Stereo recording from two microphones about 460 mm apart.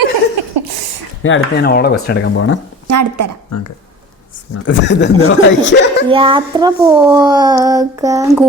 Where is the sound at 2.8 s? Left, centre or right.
Right.